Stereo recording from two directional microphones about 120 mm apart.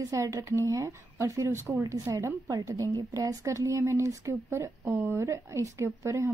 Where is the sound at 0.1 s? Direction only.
25° right (ahead or behind).